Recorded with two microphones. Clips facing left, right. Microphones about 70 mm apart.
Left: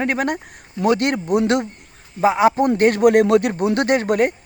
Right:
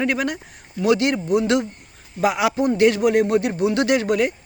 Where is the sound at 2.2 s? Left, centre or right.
Left.